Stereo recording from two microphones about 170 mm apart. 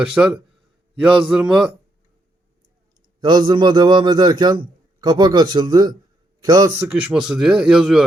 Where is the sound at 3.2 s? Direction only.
25° right (ahead or behind).